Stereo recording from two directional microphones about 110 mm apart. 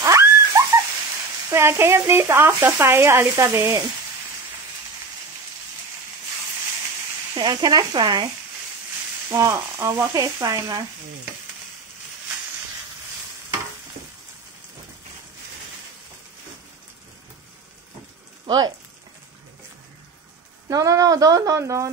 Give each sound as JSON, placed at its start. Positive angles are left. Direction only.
{"t": 0.0, "sound": "a sound", "side_deg": -30}
{"t": 1.5, "sound": "frying", "side_deg": -25}
{"t": 7.3, "sound": "speech", "side_deg": -35}
{"t": 9.3, "sound": "frying", "side_deg": -25}
{"t": 10.1, "sound": "speech", "side_deg": -30}
{"t": 20.6, "sound": "speech", "side_deg": -30}